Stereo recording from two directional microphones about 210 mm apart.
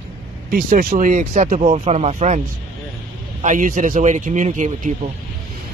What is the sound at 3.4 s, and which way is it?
Speech, 35° right (ahead or behind).